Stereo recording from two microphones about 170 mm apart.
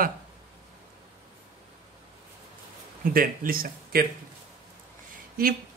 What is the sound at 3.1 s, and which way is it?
Speech, 60° right (ahead or behind).